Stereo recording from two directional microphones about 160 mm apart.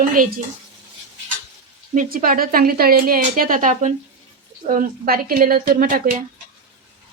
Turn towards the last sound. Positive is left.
turn(degrees=-60)  # may be behind; listen again after turning